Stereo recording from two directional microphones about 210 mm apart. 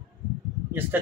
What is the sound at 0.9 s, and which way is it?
Speech, 10° right (ahead or behind).